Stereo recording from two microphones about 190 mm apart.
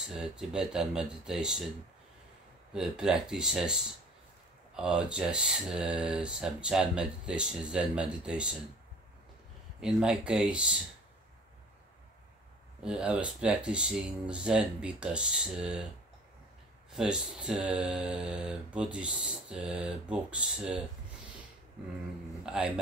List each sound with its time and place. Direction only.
0.0 s speech: 5° right (ahead or behind)
2.7 s speech: 5° right (ahead or behind)
9.8 s speech: 5° right (ahead or behind)
12.8 s speech: 5° right (ahead or behind)
16.9 s speech: 5° right (ahead or behind)
22.4 s speech: 5° right (ahead or behind)